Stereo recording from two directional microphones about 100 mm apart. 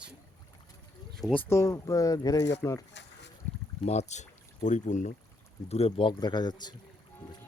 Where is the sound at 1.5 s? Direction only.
30° left (ahead or behind).